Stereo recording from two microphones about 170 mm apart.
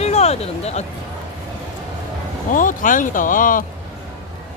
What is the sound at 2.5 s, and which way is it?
Speech, 50° left (ahead or behind).